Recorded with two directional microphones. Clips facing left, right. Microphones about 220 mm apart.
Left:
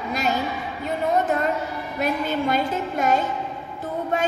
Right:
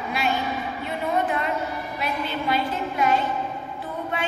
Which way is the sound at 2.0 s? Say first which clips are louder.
Left 5 dB; 45° left (ahead or behind).